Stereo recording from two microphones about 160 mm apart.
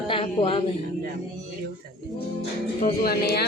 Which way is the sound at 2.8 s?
75° left (ahead or behind).